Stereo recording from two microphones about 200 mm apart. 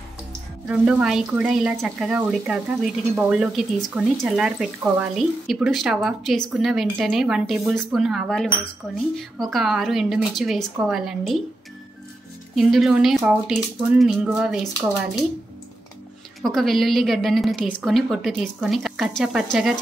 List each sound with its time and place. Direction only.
0.7 s speech: 5° right (ahead or behind)
12.5 s speech: centre (ahead or behind)
16.4 s speech: centre (ahead or behind)